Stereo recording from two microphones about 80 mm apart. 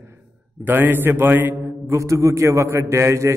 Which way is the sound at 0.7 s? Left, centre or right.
Right.